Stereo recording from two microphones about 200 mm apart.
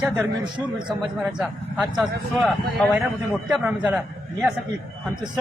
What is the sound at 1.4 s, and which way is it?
Speech, centre (ahead or behind).